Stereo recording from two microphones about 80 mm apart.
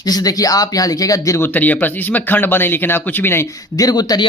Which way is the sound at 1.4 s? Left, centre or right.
Left.